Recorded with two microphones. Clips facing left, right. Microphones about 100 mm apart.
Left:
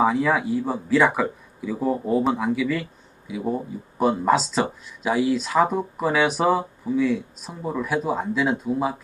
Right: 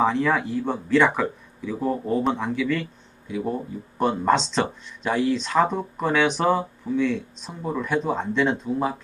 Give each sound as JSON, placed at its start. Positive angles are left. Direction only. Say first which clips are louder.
{"t": 0.0, "sound": "speech", "louder": "left 1 dB", "side_deg": 5}